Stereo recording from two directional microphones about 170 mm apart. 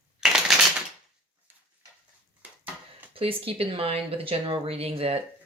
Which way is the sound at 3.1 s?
35° right (ahead or behind).